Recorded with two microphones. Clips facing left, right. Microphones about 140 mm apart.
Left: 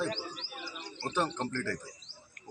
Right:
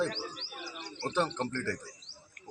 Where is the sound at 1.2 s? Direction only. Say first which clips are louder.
Right 1 dB; 10° left (ahead or behind).